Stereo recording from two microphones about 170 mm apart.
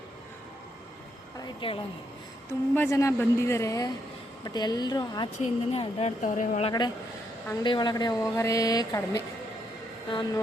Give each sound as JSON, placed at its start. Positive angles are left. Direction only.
{"t": 1.6, "sound": "a woman's voice", "side_deg": 30}
{"t": 2.5, "sound": "a woman's voice", "side_deg": 15}
{"t": 5.4, "sound": "a woman's voice", "side_deg": 40}
{"t": 6.7, "sound": "a woman's voice", "side_deg": 25}